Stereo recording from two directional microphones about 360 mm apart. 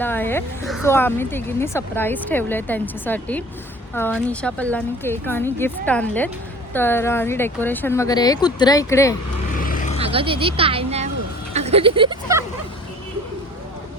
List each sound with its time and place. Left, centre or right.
0.0 s speech: centre
9.6 s a sound: left
10.0 s speech: centre